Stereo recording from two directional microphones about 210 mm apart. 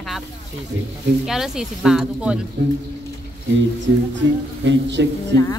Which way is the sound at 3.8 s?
60° right (ahead or behind).